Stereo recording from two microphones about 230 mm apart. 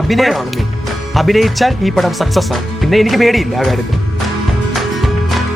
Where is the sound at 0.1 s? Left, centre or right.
Centre.